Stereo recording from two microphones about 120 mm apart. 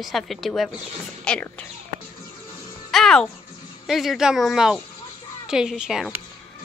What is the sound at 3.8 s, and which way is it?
Speech, centre (ahead or behind).